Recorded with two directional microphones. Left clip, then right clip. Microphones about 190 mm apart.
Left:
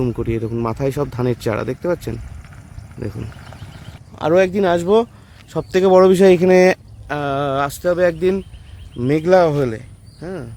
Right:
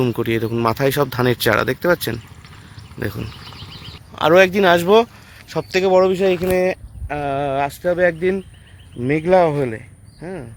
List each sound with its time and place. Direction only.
0.0 s speech: centre (ahead or behind)
4.1 s speech: centre (ahead or behind)
5.7 s speech: 60° left (ahead or behind)
7.1 s speech: 20° left (ahead or behind)